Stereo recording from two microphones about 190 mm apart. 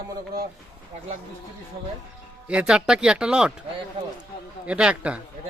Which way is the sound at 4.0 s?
25° right (ahead or behind).